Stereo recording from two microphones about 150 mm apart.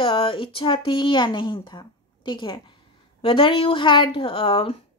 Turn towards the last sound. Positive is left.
turn(degrees=35)  # may be behind; listen again after turning